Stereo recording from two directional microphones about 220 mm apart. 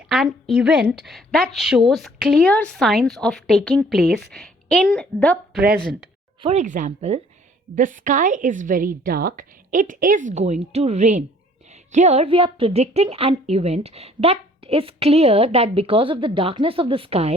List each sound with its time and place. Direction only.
0.1 s a woman's voice: centre (ahead or behind)
6.4 s a woman's voice: 30° right (ahead or behind)